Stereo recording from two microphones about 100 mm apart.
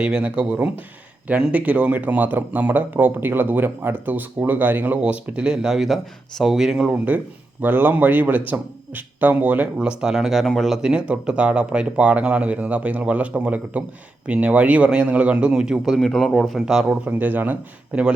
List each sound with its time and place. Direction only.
0.0 s speech: 10° right (ahead or behind)
16.0 s speech: 5° left (ahead or behind)
17.1 s speech: 15° right (ahead or behind)